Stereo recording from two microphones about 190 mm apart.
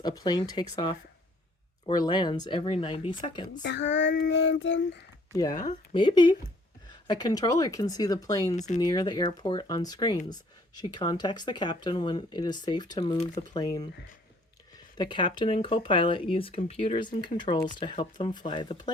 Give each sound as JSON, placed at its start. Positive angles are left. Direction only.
{"t": 0.0, "sound": "speech", "side_deg": 20}
{"t": 3.6, "sound": "speech", "side_deg": 65}
{"t": 5.3, "sound": "speech", "side_deg": 20}
{"t": 8.5, "sound": "speech", "side_deg": 40}
{"t": 8.8, "sound": "speech", "side_deg": 20}
{"t": 14.9, "sound": "speech", "side_deg": 25}